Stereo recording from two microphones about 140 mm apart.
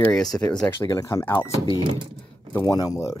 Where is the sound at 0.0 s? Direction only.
5° left (ahead or behind).